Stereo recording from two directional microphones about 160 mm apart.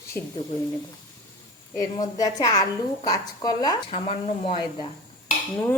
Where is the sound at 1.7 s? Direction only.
25° left (ahead or behind).